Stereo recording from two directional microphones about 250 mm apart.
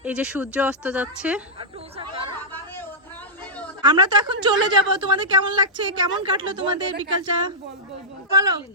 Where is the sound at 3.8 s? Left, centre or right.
Centre.